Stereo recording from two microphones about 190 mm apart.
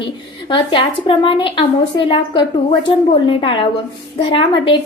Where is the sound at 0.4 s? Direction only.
25° left (ahead or behind).